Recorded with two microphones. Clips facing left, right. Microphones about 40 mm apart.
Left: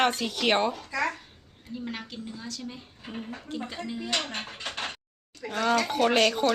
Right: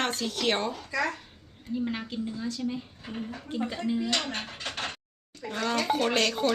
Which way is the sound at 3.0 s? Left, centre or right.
Centre.